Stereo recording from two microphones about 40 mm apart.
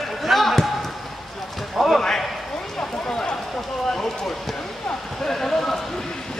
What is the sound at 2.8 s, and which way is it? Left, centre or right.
Run, left.